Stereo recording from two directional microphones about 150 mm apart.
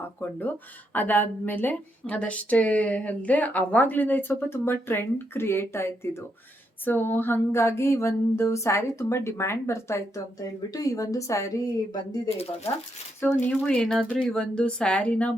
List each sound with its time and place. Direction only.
0.2 s a woman's voice: 10° left (ahead or behind)
12.7 s speech: 40° left (ahead or behind)
13.4 s a woman's voice: 10° left (ahead or behind)